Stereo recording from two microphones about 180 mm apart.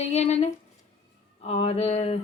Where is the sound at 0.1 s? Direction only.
35° left (ahead or behind).